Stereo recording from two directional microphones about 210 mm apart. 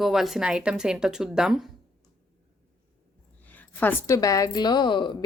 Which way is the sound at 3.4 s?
10° left (ahead or behind).